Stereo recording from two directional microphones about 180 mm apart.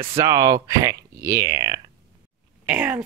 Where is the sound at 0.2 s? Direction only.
20° right (ahead or behind).